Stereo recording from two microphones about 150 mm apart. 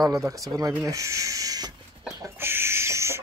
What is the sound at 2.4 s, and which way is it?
Chicken, 15° right (ahead or behind).